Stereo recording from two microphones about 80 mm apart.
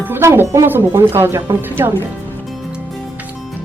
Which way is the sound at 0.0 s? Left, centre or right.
Right.